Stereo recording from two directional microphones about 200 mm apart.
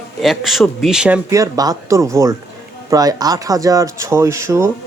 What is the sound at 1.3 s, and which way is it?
Speech, 15° right (ahead or behind).